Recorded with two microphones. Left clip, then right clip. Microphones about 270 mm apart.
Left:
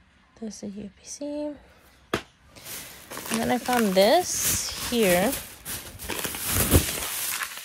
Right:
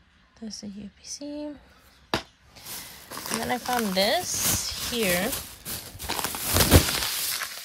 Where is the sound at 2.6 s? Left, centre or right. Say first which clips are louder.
Even; centre.